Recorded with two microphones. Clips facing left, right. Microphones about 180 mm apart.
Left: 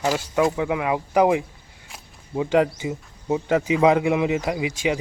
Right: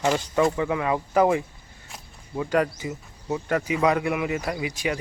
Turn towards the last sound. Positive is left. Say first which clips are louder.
# left 4 dB
turn(degrees=20)  # may be behind; listen again after turning